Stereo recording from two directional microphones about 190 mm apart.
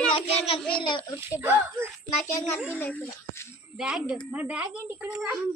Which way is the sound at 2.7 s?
10° left (ahead or behind).